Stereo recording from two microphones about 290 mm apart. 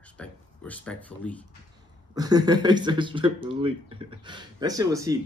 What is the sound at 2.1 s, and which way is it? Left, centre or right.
Speech, centre.